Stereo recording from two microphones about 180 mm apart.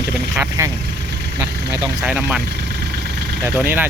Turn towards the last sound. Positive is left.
turn(degrees=-10)  # may be behind; listen again after turning